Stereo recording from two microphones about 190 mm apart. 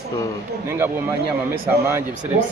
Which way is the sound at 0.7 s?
10° right (ahead or behind).